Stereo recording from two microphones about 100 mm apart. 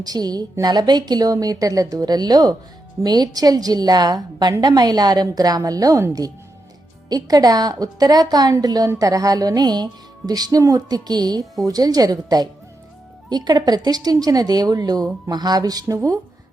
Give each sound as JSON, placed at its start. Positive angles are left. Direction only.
{"t": 0.0, "sound": "a woman's voice", "side_deg": -40}